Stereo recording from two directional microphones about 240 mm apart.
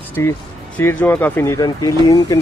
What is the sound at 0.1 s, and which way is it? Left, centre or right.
Speech, centre.